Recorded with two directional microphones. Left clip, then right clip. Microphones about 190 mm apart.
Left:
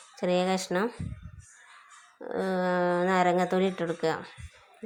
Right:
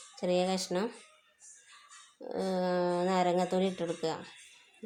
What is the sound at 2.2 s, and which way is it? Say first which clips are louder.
A woman's voice: left 4 dB; 15° left (ahead or behind).